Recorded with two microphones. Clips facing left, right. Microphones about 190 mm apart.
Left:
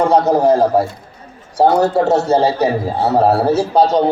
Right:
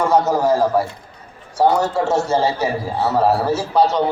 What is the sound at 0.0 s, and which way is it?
Speech, 35° left (ahead or behind).